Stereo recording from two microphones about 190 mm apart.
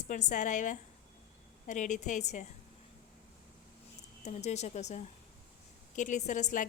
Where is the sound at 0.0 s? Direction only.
40° left (ahead or behind).